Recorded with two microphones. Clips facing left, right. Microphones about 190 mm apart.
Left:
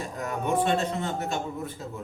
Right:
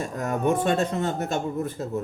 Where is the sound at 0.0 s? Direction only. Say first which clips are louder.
Right 5 dB; 45° right (ahead or behind).